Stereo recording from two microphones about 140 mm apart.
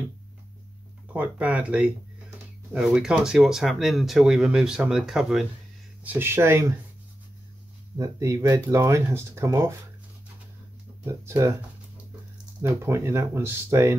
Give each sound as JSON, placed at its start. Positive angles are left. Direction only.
{"t": 1.1, "sound": "speech", "side_deg": -10}
{"t": 6.0, "sound": "speech", "side_deg": -15}
{"t": 8.0, "sound": "speech", "side_deg": -20}
{"t": 11.1, "sound": "speech", "side_deg": -20}
{"t": 12.6, "sound": "speech", "side_deg": -20}